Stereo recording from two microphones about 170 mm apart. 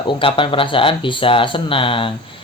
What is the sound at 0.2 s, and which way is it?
Speech, 30° left (ahead or behind).